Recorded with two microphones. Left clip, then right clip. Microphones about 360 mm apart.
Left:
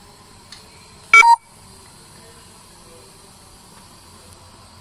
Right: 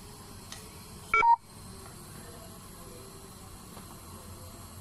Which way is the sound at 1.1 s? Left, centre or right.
Left.